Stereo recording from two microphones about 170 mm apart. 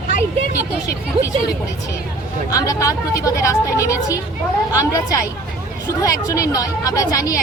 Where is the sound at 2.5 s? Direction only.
20° left (ahead or behind).